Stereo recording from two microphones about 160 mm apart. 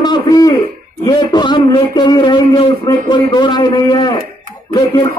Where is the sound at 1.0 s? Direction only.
25° left (ahead or behind).